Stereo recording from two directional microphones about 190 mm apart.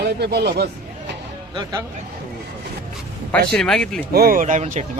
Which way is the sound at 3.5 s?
5° left (ahead or behind).